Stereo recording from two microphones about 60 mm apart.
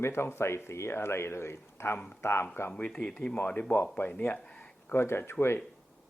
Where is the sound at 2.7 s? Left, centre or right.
Centre.